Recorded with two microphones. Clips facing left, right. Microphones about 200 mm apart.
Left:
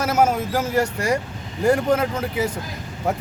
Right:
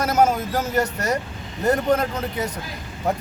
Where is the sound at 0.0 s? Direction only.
10° left (ahead or behind).